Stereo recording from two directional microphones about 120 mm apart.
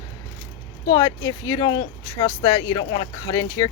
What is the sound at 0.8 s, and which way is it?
Speech, 35° left (ahead or behind).